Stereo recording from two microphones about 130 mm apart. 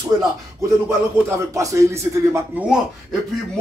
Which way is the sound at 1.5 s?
25° right (ahead or behind).